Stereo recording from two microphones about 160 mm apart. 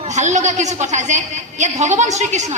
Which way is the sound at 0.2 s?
45° right (ahead or behind).